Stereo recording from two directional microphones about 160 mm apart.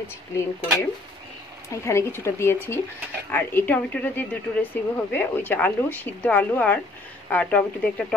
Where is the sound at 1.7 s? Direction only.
15° left (ahead or behind).